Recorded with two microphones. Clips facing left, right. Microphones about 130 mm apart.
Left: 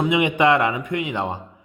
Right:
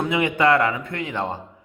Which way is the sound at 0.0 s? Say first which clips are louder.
Left 2 dB; 20° left (ahead or behind).